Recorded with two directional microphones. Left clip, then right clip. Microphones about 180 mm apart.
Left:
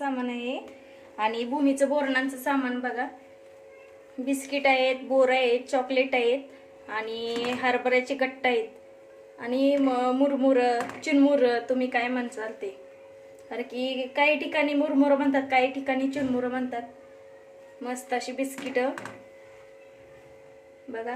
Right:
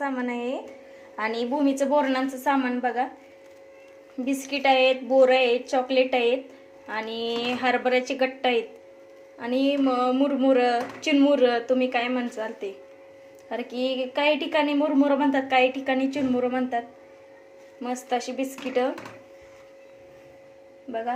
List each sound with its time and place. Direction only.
0.0 s a sound: 15° right (ahead or behind)
1.5 s a woman's voice: 25° right (ahead or behind)
4.3 s a woman's voice: 20° right (ahead or behind)
17.8 s a woman's voice: 15° right (ahead or behind)